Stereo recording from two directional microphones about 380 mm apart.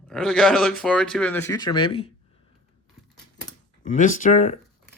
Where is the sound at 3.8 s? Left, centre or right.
Centre.